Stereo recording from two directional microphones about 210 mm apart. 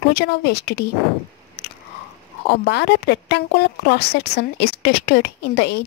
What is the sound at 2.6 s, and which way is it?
A woman's voice, 55° left (ahead or behind).